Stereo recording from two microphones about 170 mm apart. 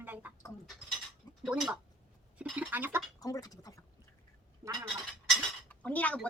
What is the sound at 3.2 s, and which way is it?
Speech, 20° left (ahead or behind).